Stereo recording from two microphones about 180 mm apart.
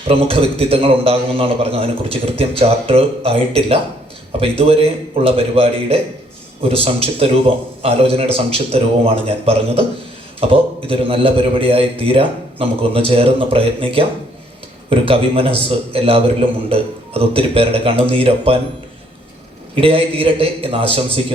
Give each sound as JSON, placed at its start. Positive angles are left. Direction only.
{"t": 0.1, "sound": "a man's voice", "side_deg": -35}
{"t": 19.7, "sound": "a man's voice", "side_deg": -30}